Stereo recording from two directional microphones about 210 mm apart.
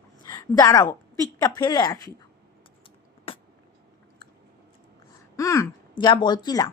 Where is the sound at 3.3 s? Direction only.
25° left (ahead or behind).